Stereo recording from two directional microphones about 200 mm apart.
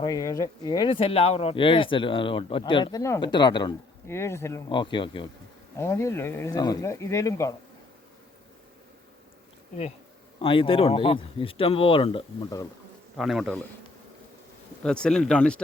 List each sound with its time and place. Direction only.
0.0 s speech: 20° left (ahead or behind)
4.7 s speech: 25° left (ahead or behind)
5.7 s speech: 15° left (ahead or behind)
10.4 s speech: 25° left (ahead or behind)
13.1 s speech: centre (ahead or behind)
14.8 s speech: 5° left (ahead or behind)